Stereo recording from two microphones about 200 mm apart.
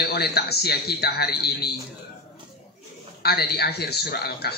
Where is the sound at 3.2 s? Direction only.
55° left (ahead or behind).